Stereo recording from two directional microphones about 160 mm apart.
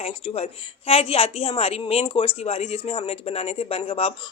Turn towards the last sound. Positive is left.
turn(degrees=40)  # may be behind; listen again after turning